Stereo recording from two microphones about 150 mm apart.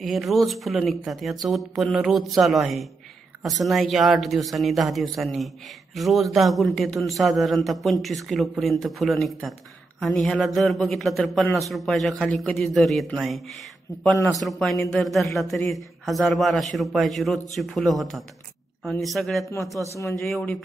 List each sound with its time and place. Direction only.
0.0 s a man's voice: centre (ahead or behind)
14.1 s a man's voice: 25° left (ahead or behind)
14.4 s a man's voice: centre (ahead or behind)
20.0 s a man's voice: 20° left (ahead or behind)
20.2 s a man's voice: centre (ahead or behind)